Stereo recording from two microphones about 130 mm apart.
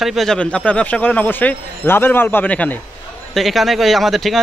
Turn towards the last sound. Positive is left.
turn(degrees=0)  # may be behind; listen again after turning